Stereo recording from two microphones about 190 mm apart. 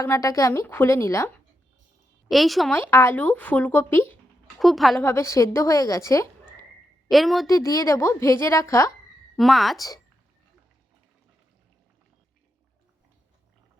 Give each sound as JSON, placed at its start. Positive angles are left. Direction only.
{"t": 0.0, "sound": "speech", "side_deg": 15}
{"t": 2.3, "sound": "speech", "side_deg": 0}
{"t": 2.7, "sound": "speech", "side_deg": 10}
{"t": 4.6, "sound": "speech", "side_deg": 0}
{"t": 5.0, "sound": "speech", "side_deg": 15}
{"t": 7.1, "sound": "speech", "side_deg": 0}
{"t": 7.4, "sound": "speech", "side_deg": 15}
{"t": 9.4, "sound": "speech", "side_deg": 0}